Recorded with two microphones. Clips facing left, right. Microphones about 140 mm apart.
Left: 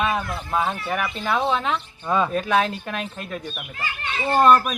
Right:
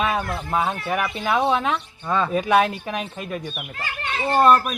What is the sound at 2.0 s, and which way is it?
Speech, 10° left (ahead or behind).